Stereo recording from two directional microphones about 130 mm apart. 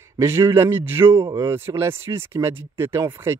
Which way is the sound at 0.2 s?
20° right (ahead or behind).